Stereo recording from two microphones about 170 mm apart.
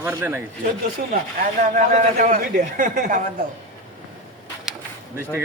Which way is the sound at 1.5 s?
50° right (ahead or behind).